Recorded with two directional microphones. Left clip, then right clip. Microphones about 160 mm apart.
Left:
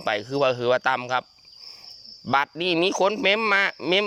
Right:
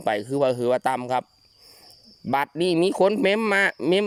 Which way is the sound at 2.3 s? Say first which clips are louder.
Even; 45° right (ahead or behind).